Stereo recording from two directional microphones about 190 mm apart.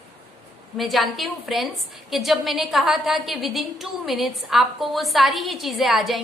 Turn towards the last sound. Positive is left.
turn(degrees=0)  # may be behind; listen again after turning